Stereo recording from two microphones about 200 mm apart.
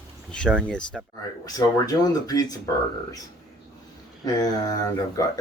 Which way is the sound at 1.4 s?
20° left (ahead or behind).